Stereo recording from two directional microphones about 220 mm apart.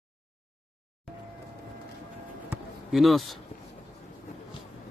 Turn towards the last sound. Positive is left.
turn(degrees=0)  # may be behind; listen again after turning